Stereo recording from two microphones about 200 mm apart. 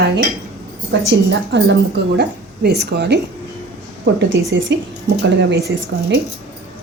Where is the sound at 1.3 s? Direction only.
60° right (ahead or behind).